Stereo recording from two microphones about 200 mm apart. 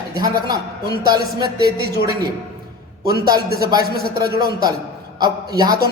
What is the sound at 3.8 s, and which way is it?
Speech, 50° right (ahead or behind).